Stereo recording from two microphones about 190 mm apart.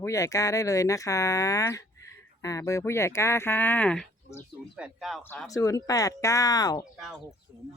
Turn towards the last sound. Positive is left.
turn(degrees=20)  # may be behind; listen again after turning